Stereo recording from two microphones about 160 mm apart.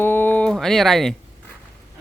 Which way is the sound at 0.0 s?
10° left (ahead or behind).